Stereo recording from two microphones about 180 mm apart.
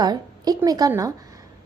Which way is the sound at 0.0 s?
20° right (ahead or behind).